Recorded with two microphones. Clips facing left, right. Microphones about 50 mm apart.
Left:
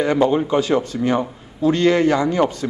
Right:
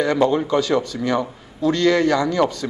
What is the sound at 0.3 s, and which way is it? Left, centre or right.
A man's voice, left.